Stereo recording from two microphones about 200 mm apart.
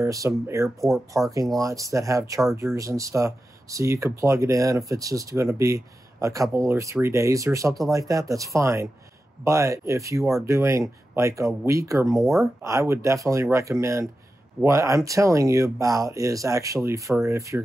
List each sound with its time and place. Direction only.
0.0 s speech: 15° right (ahead or behind)
0.7 s speech: centre (ahead or behind)
1.6 s speech: 15° right (ahead or behind)
12.1 s speech: centre (ahead or behind)
12.6 s speech: 15° right (ahead or behind)